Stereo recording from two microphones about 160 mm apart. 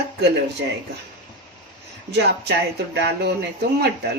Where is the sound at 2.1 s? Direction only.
90° right.